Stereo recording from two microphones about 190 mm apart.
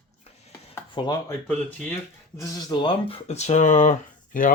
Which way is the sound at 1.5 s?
5° left (ahead or behind).